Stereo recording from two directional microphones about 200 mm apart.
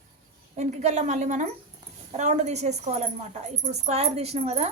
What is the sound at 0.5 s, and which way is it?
A woman's voice, 35° right (ahead or behind).